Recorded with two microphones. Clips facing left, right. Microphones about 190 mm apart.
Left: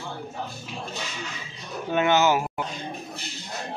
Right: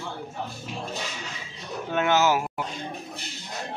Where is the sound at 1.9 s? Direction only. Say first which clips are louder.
Left 1 dB; centre (ahead or behind).